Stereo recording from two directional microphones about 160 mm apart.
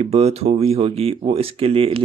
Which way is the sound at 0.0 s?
40° right (ahead or behind).